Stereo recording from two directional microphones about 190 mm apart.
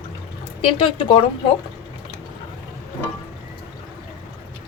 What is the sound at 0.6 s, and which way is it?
Speech, 30° left (ahead or behind).